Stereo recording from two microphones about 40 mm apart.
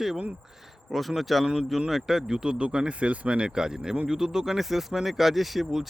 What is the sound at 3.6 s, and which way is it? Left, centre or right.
Speech, centre.